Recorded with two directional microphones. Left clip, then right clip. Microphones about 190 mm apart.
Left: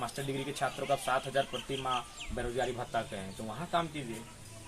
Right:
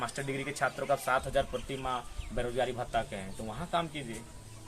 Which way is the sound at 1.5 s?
20° right (ahead or behind).